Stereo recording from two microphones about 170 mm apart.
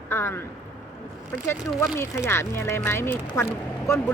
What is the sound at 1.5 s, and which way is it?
Speech, 15° left (ahead or behind).